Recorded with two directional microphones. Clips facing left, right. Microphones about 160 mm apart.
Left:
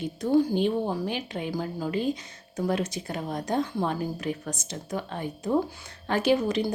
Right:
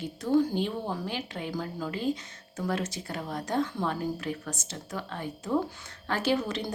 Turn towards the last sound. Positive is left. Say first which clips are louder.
# left 5 dB
turn(degrees=10)  # may be behind; listen again after turning